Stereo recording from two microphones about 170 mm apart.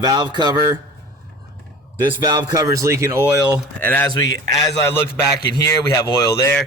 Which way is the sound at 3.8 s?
10° left (ahead or behind).